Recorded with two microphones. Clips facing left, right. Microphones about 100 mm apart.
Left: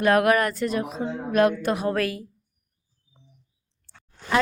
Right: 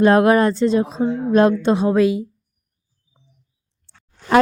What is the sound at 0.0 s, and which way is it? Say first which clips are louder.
Speech: right 6 dB; 30° right (ahead or behind).